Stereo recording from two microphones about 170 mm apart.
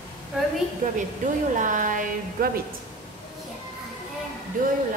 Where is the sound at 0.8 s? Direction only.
50° right (ahead or behind).